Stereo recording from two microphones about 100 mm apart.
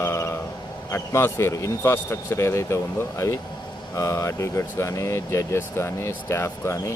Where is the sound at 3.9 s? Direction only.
30° left (ahead or behind).